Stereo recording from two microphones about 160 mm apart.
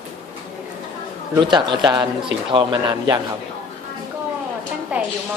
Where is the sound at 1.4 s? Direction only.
30° right (ahead or behind).